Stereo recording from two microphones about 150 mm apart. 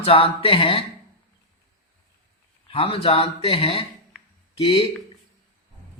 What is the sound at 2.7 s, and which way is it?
Speech, 40° left (ahead or behind).